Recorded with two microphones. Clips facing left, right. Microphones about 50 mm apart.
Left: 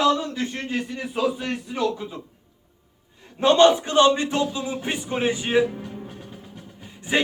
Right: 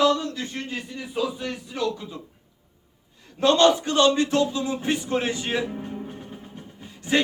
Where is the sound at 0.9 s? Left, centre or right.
Left.